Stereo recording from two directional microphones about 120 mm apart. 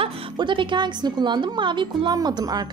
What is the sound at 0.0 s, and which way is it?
A woman's voice, 45° right (ahead or behind).